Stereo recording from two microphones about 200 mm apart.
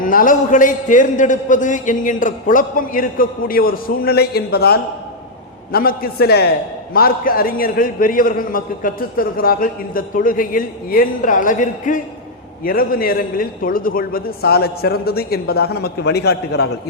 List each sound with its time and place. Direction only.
0.0 s a man's voice: 45° left (ahead or behind)